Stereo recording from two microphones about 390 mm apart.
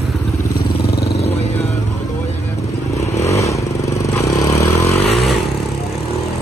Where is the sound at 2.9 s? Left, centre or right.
Centre.